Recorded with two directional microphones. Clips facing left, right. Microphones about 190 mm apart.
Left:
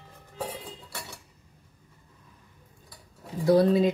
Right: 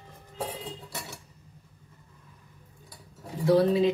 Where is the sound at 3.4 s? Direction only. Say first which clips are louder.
Left 1 dB; 40° left (ahead or behind).